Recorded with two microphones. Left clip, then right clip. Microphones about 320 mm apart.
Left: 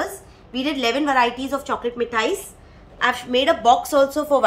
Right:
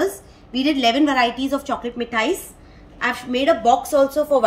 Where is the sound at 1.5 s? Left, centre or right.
Centre.